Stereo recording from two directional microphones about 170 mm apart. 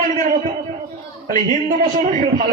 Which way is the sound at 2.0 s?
50° right (ahead or behind).